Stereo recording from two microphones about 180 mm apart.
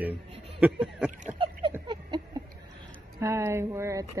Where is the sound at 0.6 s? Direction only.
5° right (ahead or behind).